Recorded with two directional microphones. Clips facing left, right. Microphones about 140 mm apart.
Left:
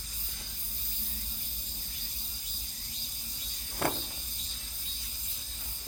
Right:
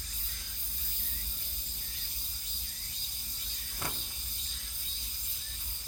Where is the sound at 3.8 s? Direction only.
60° left (ahead or behind).